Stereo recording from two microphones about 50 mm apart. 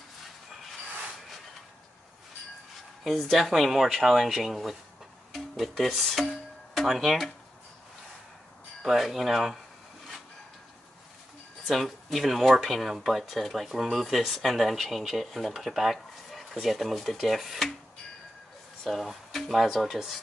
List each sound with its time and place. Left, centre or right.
3.0 s speech: centre
8.8 s speech: centre
11.7 s speech: centre
18.9 s speech: centre